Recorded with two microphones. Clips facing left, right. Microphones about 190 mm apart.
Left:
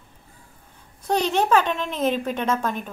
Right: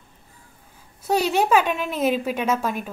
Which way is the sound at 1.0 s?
10° right (ahead or behind).